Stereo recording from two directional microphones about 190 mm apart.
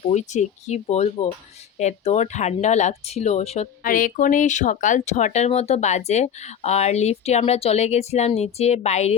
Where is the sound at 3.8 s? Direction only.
45° left (ahead or behind).